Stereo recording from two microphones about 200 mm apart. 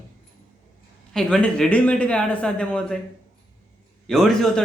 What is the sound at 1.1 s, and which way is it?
Speech, 5° left (ahead or behind).